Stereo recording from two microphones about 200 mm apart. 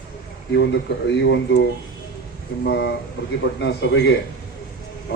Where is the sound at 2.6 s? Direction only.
55° left (ahead or behind).